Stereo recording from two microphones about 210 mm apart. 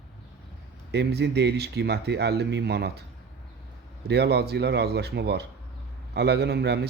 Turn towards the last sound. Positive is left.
turn(degrees=-50)  # may be behind; listen again after turning